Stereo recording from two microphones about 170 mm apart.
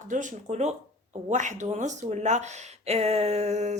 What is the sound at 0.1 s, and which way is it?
Speech, 45° right (ahead or behind).